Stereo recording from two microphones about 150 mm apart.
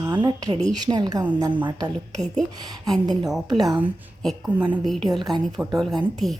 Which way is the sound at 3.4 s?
25° right (ahead or behind).